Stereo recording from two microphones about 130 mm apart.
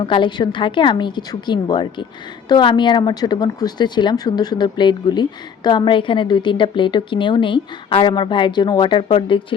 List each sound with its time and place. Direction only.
0.0 s a woman's voice: 40° left (ahead or behind)